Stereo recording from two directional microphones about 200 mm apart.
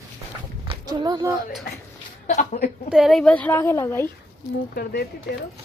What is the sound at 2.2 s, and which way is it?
Speech, 40° left (ahead or behind).